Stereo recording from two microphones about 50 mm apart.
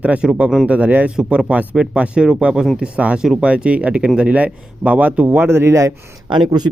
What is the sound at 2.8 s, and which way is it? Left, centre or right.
A man's voice, right.